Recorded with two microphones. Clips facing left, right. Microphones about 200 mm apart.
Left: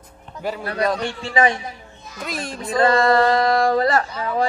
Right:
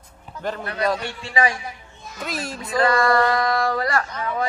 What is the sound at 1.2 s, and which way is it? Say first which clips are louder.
Speech: left 4 dB; 25° left (ahead or behind).